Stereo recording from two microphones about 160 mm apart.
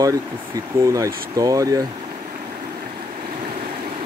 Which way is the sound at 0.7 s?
20° right (ahead or behind).